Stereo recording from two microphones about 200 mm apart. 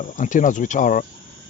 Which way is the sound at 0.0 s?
40° left (ahead or behind).